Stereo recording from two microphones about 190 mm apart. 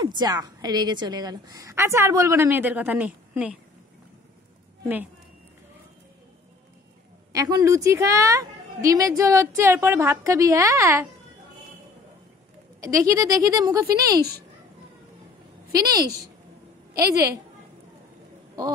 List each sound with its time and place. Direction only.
0.0 s a woman's voice: 20° right (ahead or behind); by 3.5 s 5° right (ahead or behind)
7.3 s a woman's voice: 20° right (ahead or behind)
12.8 s a woman's voice: 15° right (ahead or behind)
15.7 s a woman's voice: 20° right (ahead or behind)